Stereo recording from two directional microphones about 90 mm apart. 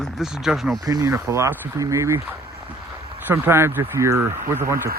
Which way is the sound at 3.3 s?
25° right (ahead or behind).